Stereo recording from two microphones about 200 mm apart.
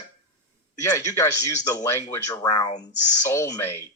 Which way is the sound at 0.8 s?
15° left (ahead or behind).